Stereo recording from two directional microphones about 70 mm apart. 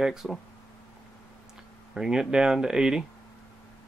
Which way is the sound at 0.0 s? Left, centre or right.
Centre.